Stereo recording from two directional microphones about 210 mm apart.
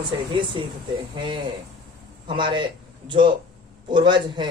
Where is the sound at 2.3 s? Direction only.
25° right (ahead or behind).